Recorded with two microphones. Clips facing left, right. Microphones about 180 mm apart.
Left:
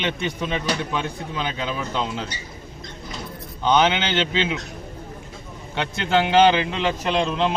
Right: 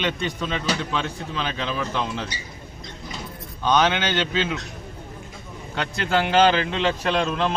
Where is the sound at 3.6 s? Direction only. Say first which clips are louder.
Left 1 dB; 20° left (ahead or behind).